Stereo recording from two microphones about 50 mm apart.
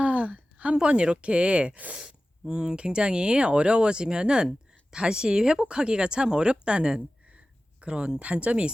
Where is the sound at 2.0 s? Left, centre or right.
Centre.